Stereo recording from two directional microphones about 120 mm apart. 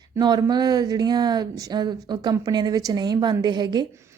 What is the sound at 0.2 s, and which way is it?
A woman's voice, 35° right (ahead or behind).